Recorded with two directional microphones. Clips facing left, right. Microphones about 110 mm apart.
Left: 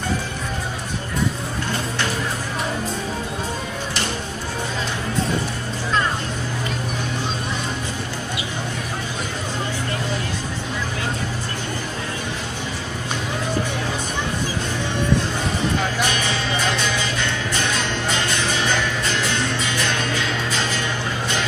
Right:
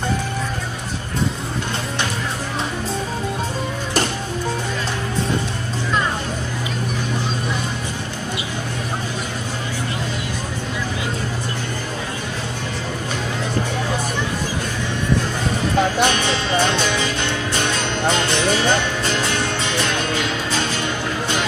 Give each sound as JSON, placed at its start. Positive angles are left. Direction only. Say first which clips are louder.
{"t": 16.0, "sound": "music", "louder": "right 4 dB", "side_deg": -30}